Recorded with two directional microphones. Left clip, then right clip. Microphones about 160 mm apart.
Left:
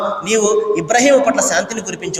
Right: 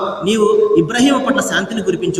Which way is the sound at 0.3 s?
30° left (ahead or behind).